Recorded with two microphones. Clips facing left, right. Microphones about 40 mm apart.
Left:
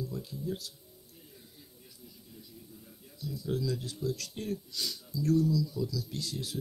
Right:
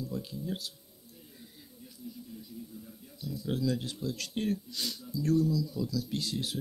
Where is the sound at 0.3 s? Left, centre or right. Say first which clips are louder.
Even; right.